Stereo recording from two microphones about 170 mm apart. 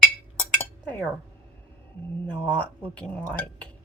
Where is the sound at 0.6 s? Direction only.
10° left (ahead or behind).